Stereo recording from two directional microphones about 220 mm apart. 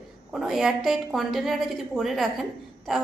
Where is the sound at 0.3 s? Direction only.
Centre (ahead or behind).